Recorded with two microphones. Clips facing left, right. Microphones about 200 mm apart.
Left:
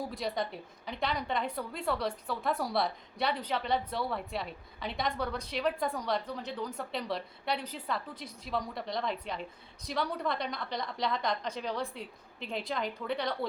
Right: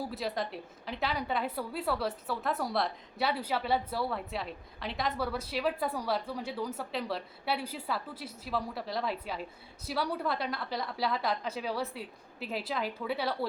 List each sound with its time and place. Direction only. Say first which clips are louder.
0.1 s a woman's voice: even; centre (ahead or behind)